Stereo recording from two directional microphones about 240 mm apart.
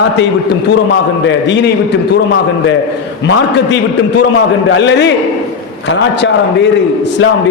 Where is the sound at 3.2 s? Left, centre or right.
Left.